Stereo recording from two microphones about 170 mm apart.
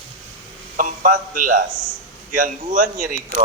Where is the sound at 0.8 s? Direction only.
50° right (ahead or behind).